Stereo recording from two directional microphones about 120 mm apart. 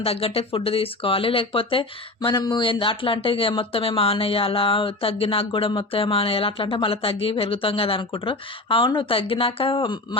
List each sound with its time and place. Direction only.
0.0 s speech: 55° left (ahead or behind)